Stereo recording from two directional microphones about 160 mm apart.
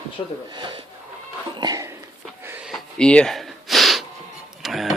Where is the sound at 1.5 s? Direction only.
25° right (ahead or behind).